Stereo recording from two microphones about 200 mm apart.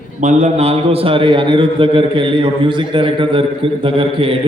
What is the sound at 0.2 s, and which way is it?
A man's voice, 35° right (ahead or behind).